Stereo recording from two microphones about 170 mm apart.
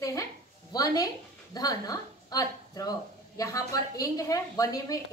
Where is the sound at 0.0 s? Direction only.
20° left (ahead or behind).